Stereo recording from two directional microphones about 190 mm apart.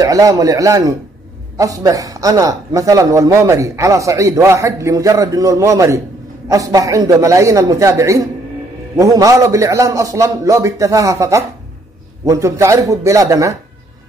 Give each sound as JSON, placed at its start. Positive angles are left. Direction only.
{"t": 0.0, "sound": "a man's voice", "side_deg": -15}